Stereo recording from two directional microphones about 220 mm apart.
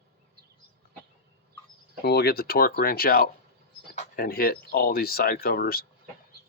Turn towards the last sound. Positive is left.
turn(degrees=45)  # may be behind; listen again after turning